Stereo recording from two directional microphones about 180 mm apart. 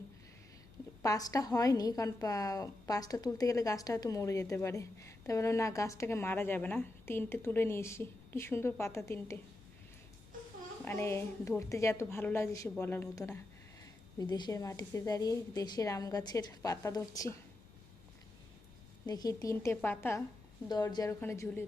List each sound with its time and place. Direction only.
1.0 s a woman's voice: 20° left (ahead or behind)
10.8 s a woman's voice: 15° left (ahead or behind)
19.0 s a woman's voice: 20° left (ahead or behind)